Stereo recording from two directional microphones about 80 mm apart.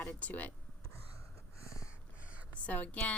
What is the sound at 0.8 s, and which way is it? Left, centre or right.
Gasp, left.